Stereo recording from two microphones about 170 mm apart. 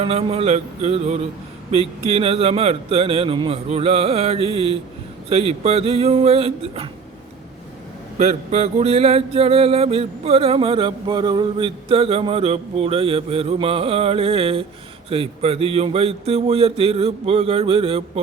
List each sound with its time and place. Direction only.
0.0 s mantra: 35° right (ahead or behind)
8.2 s mantra: 40° right (ahead or behind)